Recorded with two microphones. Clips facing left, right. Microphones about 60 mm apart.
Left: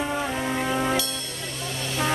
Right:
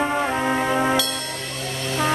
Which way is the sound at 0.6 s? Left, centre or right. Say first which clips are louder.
Right 4 dB; right.